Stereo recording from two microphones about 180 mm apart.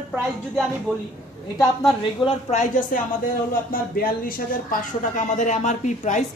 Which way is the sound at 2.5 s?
45° left (ahead or behind).